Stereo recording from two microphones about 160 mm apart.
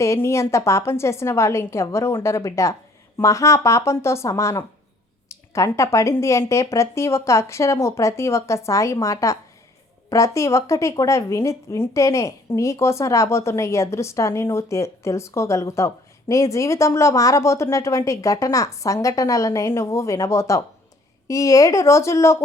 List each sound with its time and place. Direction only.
0.0 s a woman's voice: 20° left (ahead or behind)